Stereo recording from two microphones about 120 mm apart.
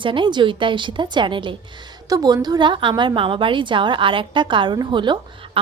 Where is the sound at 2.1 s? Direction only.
30° right (ahead or behind).